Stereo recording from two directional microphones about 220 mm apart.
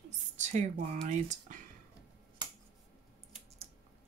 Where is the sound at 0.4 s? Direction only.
35° right (ahead or behind).